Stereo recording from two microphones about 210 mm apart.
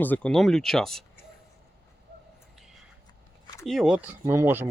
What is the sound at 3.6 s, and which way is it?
Speech, centre (ahead or behind).